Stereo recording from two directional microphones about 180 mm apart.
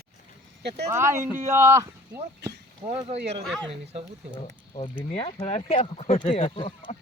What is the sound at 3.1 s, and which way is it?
Speech, 70° right (ahead or behind).